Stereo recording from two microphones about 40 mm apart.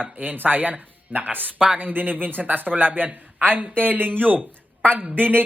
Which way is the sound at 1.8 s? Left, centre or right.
Right.